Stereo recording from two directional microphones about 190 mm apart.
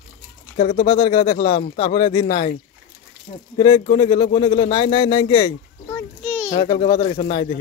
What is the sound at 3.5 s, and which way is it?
Speech, 25° left (ahead or behind).